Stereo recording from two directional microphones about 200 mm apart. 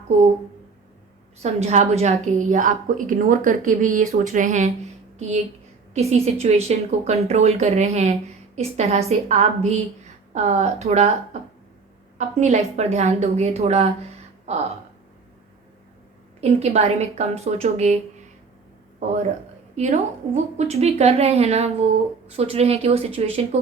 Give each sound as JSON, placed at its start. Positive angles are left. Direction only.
{"t": 1.4, "sound": "a woman's voice", "side_deg": -35}
{"t": 5.9, "sound": "a woman's voice", "side_deg": -30}
{"t": 12.1, "sound": "a woman's voice", "side_deg": -35}
{"t": 16.4, "sound": "a woman's voice", "side_deg": -30}
{"t": 19.7, "sound": "a woman's voice", "side_deg": -35}